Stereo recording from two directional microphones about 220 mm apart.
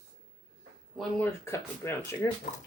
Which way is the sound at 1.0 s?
10° left (ahead or behind).